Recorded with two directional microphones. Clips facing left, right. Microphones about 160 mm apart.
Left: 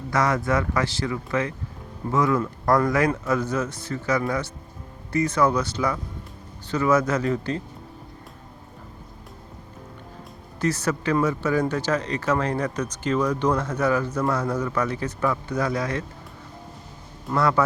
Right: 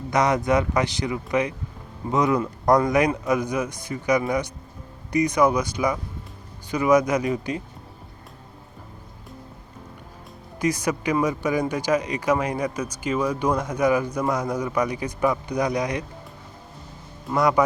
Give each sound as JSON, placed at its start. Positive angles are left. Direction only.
{"t": 0.1, "sound": "speech", "side_deg": -20}
{"t": 10.6, "sound": "speech", "side_deg": -15}
{"t": 17.3, "sound": "speech", "side_deg": -15}